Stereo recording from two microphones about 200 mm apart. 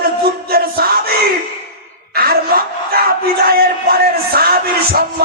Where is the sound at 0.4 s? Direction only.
50° right (ahead or behind).